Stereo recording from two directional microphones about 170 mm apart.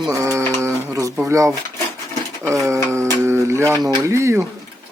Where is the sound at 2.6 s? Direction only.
15° right (ahead or behind).